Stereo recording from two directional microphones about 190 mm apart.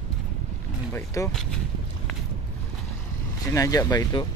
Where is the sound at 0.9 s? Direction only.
15° left (ahead or behind).